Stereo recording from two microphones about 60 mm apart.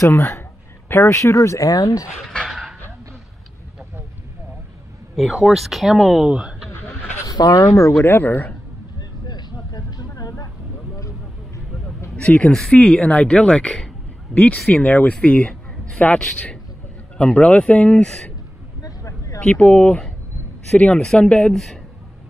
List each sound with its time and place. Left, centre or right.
0.0 s a man's voice: left
0.8 s speech: left
1.1 s speech: left
2.2 s dog: centre
5.1 s speech: centre
7.2 s speech: left
7.9 s speech: left
9.8 s a sound: left
11.0 s vehicle: left
12.2 s speech: centre
17.2 s speech: centre
18.8 s vehicle: left
19.4 s speech: centre